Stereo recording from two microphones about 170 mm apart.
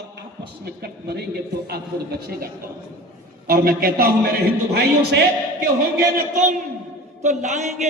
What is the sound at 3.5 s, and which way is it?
Speech, 60° right (ahead or behind).